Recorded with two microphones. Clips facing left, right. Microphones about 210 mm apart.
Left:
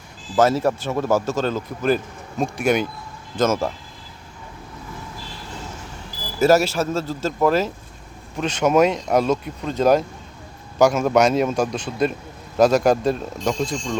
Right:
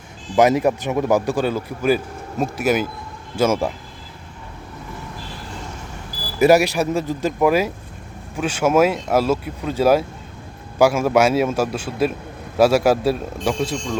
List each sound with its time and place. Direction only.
0.3 s speech: 15° right (ahead or behind)
6.4 s speech: 15° right (ahead or behind)